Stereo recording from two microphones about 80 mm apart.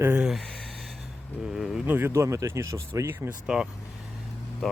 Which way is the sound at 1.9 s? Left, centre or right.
Right.